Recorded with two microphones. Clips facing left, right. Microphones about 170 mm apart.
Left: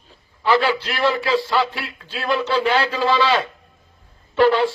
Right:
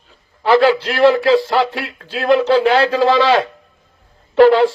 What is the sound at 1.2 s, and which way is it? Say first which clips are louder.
A man's voice: right 6 dB; 50° right (ahead or behind).